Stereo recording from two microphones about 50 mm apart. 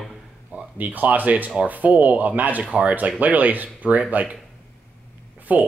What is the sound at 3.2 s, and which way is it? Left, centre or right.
Speech, right.